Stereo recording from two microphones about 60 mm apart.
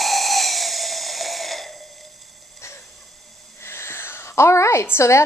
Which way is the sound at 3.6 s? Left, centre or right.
Left.